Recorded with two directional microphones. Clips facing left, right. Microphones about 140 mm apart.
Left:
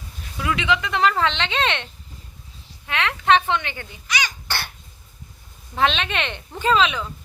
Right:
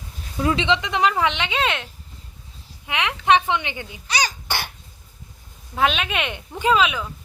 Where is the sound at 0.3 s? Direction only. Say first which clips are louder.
Right 2 dB; 30° right (ahead or behind); by 1.9 s 5° right (ahead or behind).